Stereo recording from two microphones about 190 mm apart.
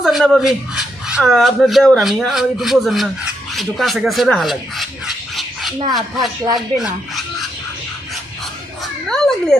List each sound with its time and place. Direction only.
0.0 s speech: centre (ahead or behind)
3.5 s a sound: centre (ahead or behind)
6.1 s speech: 20° right (ahead or behind)
6.7 s speech: centre (ahead or behind)
8.8 s cat: 5° left (ahead or behind)